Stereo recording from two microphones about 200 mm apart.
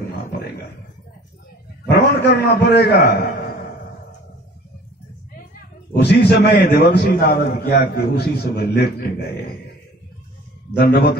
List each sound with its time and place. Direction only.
1.9 s a man's voice: 55° left (ahead or behind)
5.9 s a man's voice: 55° left (ahead or behind)
10.8 s a man's voice: 50° left (ahead or behind)